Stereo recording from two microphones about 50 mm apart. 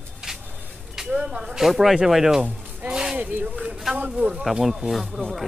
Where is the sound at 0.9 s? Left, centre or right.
Centre.